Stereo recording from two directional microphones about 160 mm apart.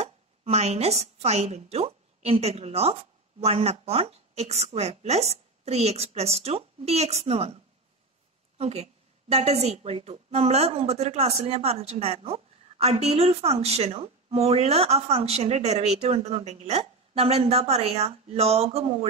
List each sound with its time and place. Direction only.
0.0 s a woman's voice: 40° right (ahead or behind)
8.5 s a woman's voice: 40° right (ahead or behind)